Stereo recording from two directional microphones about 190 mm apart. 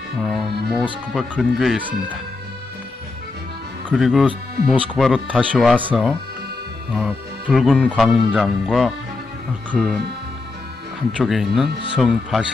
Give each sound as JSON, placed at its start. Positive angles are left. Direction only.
{"t": 0.2, "sound": "speech", "side_deg": 0}
{"t": 3.9, "sound": "speech", "side_deg": 0}
{"t": 11.1, "sound": "speech", "side_deg": 0}